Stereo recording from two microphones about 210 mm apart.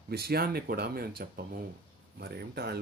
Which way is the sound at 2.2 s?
50° right (ahead or behind).